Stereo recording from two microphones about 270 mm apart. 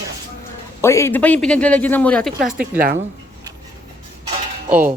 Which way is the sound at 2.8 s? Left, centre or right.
Right.